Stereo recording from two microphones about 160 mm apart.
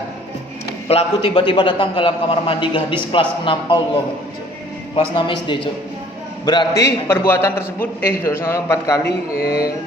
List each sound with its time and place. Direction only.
0.9 s a man's voice: 40° left (ahead or behind)
4.9 s a man's voice: 30° left (ahead or behind)
7.1 s a man's voice: 15° left (ahead or behind)